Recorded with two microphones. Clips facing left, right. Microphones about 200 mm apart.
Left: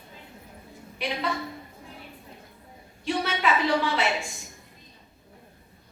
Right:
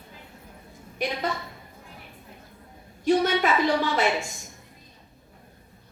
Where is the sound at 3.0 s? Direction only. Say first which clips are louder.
Right 5 dB; 45° right (ahead or behind).